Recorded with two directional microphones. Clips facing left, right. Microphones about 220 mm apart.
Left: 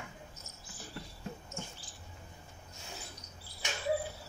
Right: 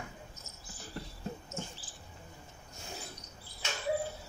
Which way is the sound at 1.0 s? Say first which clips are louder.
Right 3 dB; 40° right (ahead or behind).